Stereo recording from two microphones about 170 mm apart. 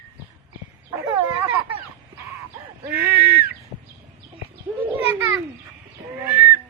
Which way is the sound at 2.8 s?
15° right (ahead or behind).